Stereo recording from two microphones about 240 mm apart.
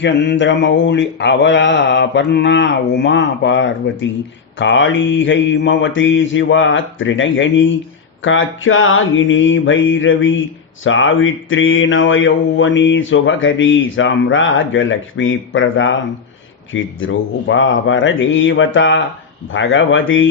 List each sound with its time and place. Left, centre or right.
0.0 s mantra: left